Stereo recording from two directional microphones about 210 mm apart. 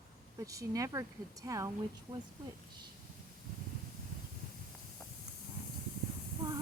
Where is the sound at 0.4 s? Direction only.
15° right (ahead or behind).